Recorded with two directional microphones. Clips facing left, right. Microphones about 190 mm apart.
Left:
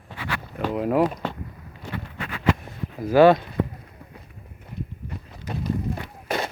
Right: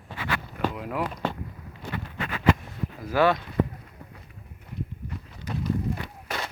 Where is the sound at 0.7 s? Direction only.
35° left (ahead or behind).